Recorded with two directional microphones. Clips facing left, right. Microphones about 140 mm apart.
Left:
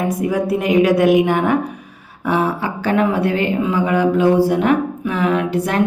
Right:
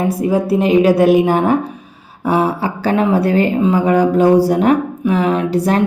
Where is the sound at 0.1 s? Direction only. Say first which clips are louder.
Right 3 dB; 30° right (ahead or behind).